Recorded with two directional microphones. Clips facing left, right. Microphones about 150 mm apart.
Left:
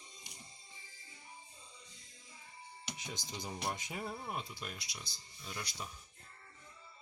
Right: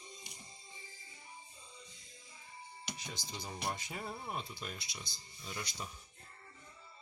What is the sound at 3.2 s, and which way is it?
Speech, 20° left (ahead or behind).